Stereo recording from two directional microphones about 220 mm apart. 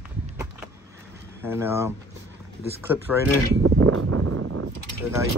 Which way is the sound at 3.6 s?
80° right.